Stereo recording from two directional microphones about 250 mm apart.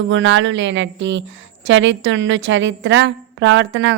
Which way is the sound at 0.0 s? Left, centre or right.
Right.